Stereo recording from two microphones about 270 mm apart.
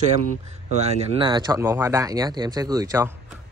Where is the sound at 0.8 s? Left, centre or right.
Right.